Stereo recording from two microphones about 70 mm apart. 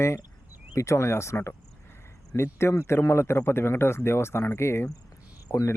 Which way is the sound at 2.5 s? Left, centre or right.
Left.